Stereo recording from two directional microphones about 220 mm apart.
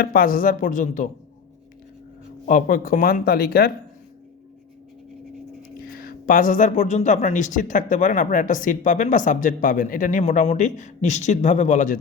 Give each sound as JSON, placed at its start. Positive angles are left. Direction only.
{"t": 0.0, "sound": "speech", "side_deg": 40}
{"t": 2.5, "sound": "speech", "side_deg": 40}
{"t": 5.6, "sound": "speech", "side_deg": 40}